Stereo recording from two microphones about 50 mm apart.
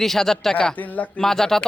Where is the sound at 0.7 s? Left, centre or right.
Left.